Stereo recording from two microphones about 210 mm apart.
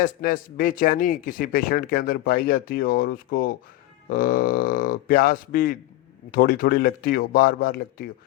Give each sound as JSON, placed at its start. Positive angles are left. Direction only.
{"t": 0.0, "sound": "speech", "side_deg": 45}